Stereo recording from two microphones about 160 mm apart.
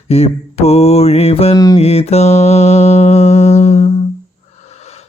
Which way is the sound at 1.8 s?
40° left (ahead or behind).